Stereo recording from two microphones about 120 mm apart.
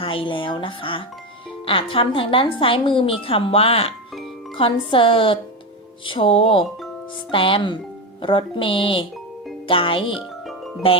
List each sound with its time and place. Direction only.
0.0 s speech: 45° left (ahead or behind)